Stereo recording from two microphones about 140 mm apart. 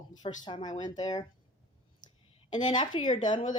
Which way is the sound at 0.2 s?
30° left (ahead or behind).